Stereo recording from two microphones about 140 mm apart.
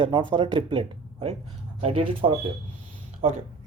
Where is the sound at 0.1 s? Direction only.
35° right (ahead or behind).